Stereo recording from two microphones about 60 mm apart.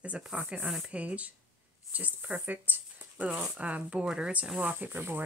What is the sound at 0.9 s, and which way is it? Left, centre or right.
Speech, right.